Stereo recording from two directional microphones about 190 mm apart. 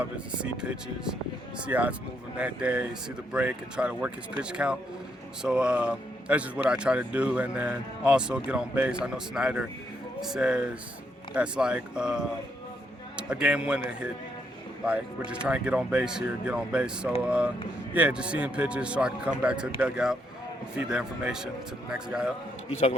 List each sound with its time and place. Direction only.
0.0 s speech: 5° right (ahead or behind)
14.8 s speech: 5° right (ahead or behind)